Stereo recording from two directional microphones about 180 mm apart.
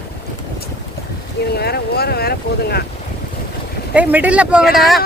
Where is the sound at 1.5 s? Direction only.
60° left (ahead or behind).